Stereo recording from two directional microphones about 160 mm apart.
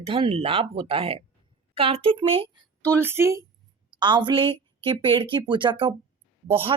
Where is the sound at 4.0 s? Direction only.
30° right (ahead or behind).